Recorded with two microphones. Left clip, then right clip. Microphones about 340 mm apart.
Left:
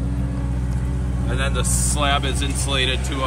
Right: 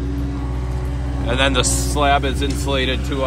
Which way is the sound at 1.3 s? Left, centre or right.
Centre.